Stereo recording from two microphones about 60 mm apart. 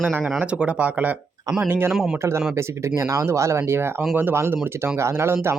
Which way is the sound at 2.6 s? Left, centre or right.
Right.